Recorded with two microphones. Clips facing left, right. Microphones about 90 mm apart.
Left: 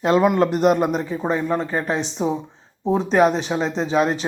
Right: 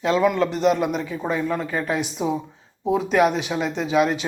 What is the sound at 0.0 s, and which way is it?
Speech, 50° left (ahead or behind).